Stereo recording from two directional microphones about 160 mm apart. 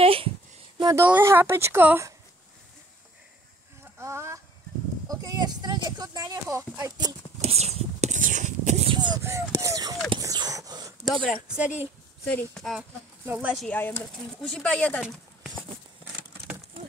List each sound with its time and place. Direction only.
0.0 s a sound: 35° right (ahead or behind)
0.7 s a sound: 25° right (ahead or behind)
1.0 s speech: 10° right (ahead or behind)
4.0 s speech: 20° right (ahead or behind)
7.4 s a sound: 40° right (ahead or behind)
8.9 s speech: 25° right (ahead or behind)
10.0 s whispering: 25° right (ahead or behind)
11.4 s speech: 5° right (ahead or behind)
13.2 s speech: 10° right (ahead or behind)
13.7 s speech: 10° left (ahead or behind)
15.0 s clip-clop: 5° right (ahead or behind)